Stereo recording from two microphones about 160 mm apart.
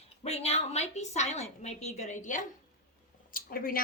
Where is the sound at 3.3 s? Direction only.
65° left (ahead or behind).